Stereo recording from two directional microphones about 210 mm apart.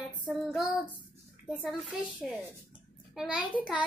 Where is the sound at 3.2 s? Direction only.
5° right (ahead or behind).